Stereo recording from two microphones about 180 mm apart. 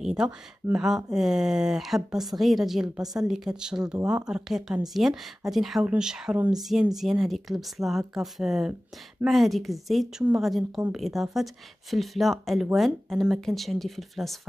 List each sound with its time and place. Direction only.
0.0 s speech: 5° right (ahead or behind)